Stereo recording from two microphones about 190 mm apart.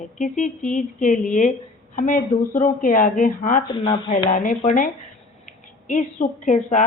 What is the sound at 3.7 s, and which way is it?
Speech, 25° left (ahead or behind).